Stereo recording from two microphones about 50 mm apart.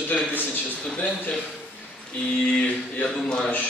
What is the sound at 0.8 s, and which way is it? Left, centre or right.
Speech, centre.